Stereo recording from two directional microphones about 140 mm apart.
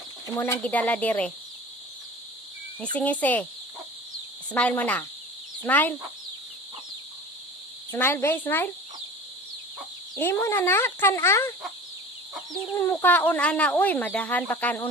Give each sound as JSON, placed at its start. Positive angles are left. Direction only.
{"t": 0.3, "sound": "speech", "side_deg": 20}
{"t": 2.8, "sound": "speech", "side_deg": 10}
{"t": 4.5, "sound": "speech", "side_deg": 10}
{"t": 7.9, "sound": "speech", "side_deg": 15}
{"t": 10.2, "sound": "speech", "side_deg": 15}
{"t": 12.7, "sound": "speech", "side_deg": 15}